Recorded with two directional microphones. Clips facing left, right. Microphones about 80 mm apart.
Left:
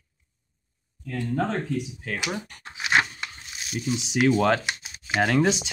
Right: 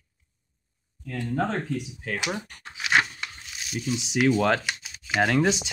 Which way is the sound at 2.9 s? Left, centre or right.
Centre.